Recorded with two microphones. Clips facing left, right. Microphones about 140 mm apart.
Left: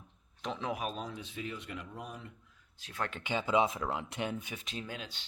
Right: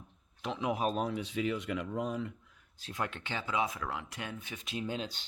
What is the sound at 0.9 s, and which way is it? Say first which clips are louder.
Speech: right 7 dB; 60° right (ahead or behind).